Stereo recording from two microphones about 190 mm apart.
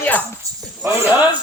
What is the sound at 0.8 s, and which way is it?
Speech, 15° right (ahead or behind).